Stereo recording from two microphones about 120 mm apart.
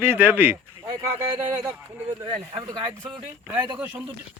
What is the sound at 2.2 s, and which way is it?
Speech, 40° right (ahead or behind).